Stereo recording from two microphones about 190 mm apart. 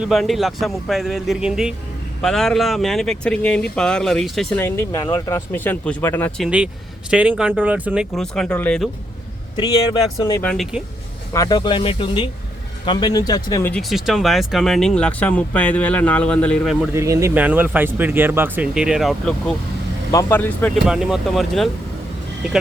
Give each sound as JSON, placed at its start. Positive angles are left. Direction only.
{"t": 0.0, "sound": "speech", "side_deg": 0}
{"t": 4.6, "sound": "speech", "side_deg": 15}
{"t": 7.1, "sound": "speech", "side_deg": -5}
{"t": 10.2, "sound": "speech", "side_deg": 20}
{"t": 10.4, "sound": "speech", "side_deg": 0}
{"t": 11.3, "sound": "speech", "side_deg": 20}
{"t": 16.9, "sound": "speech", "side_deg": -15}
{"t": 20.1, "sound": "speech", "side_deg": 15}
{"t": 20.8, "sound": "speech", "side_deg": 0}